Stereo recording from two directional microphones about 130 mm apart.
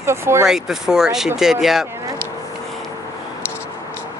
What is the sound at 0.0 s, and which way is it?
Speech, 20° right (ahead or behind).